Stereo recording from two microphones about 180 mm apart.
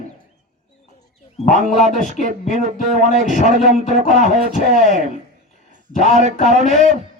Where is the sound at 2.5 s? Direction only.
40° right (ahead or behind).